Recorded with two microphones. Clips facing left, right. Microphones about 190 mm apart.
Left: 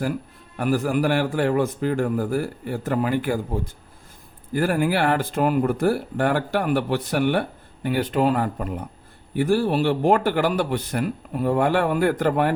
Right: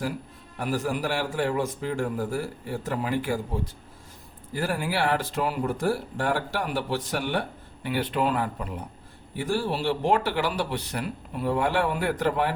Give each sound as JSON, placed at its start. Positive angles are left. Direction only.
{"t": 0.6, "sound": "a man's voice", "side_deg": 55}
{"t": 7.9, "sound": "speech", "side_deg": 45}